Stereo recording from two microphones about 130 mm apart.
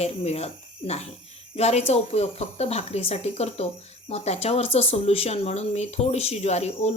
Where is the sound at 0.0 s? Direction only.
55° left (ahead or behind).